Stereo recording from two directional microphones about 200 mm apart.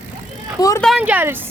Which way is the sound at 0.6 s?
15° left (ahead or behind).